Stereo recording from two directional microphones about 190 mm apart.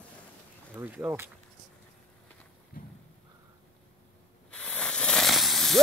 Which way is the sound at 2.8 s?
50° left (ahead or behind).